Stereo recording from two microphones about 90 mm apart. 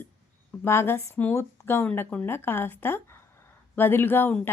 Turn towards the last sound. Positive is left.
turn(degrees=25)  # may be behind; listen again after turning